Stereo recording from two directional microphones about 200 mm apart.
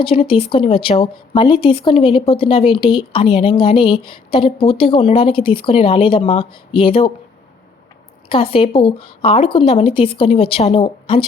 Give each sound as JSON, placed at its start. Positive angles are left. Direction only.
{"t": 0.0, "sound": "speech", "side_deg": 30}
{"t": 8.3, "sound": "speech", "side_deg": 25}